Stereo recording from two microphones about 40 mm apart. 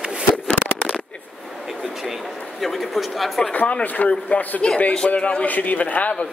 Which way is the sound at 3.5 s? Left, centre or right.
Left.